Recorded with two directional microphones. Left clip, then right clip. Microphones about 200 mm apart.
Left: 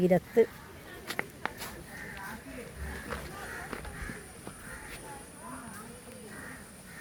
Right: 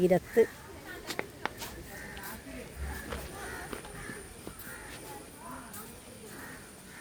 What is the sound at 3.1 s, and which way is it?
Walk, 10° left (ahead or behind).